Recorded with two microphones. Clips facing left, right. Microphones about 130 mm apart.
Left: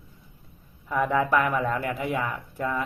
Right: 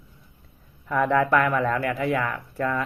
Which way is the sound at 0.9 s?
15° left (ahead or behind).